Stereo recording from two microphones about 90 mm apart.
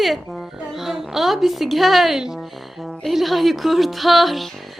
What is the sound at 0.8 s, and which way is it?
A woman's voice, centre (ahead or behind).